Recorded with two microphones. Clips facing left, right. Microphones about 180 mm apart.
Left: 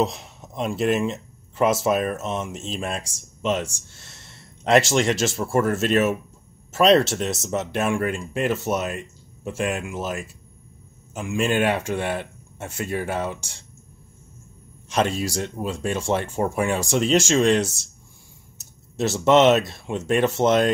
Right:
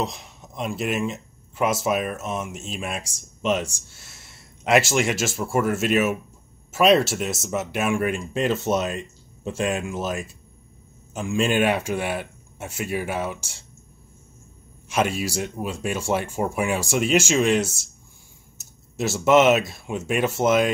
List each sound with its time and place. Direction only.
0.0 s speech: centre (ahead or behind); by 3.6 s 15° right (ahead or behind)
4.6 s speech: 5° right (ahead or behind)
8.0 s speech: 15° right (ahead or behind)
11.3 s speech: 15° right (ahead or behind)
14.9 s speech: 10° right (ahead or behind)